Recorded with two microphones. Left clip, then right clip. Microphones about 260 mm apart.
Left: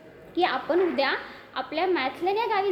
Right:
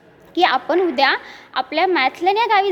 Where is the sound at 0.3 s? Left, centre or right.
Right.